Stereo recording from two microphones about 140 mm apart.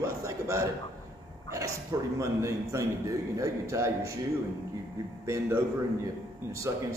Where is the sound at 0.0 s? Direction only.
20° right (ahead or behind).